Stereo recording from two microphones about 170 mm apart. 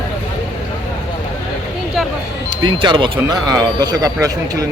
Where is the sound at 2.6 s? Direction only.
30° right (ahead or behind).